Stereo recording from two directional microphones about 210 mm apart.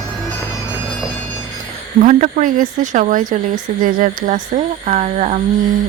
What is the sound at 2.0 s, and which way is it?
Speech, 35° right (ahead or behind).